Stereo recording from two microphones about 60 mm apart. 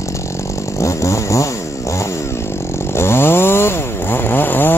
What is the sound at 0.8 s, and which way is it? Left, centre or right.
Chainsaw, left.